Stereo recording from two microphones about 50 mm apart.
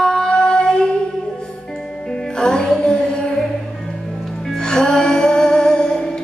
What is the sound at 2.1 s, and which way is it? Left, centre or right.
Music, centre.